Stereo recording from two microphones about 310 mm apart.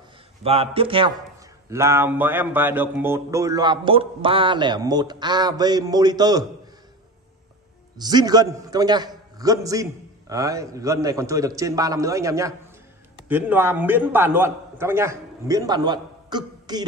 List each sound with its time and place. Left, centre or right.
0.4 s speech: centre
8.0 s speech: centre